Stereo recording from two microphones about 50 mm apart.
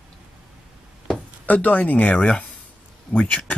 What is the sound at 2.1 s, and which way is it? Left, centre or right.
Speech, centre.